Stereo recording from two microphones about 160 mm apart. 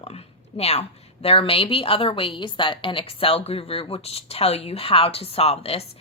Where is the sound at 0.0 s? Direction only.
40° left (ahead or behind).